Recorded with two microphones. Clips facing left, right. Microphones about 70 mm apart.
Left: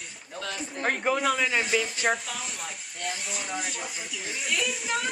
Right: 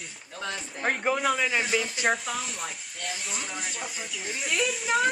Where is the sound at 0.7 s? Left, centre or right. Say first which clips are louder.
Left 1 dB; centre.